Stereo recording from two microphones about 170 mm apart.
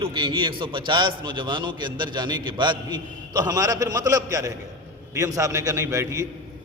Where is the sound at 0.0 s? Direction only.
30° right (ahead or behind).